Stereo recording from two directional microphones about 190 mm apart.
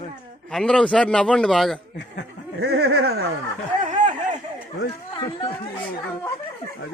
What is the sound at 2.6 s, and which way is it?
Speech, 60° right (ahead or behind).